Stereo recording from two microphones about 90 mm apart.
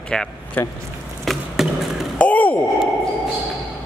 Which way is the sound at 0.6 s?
20° left (ahead or behind).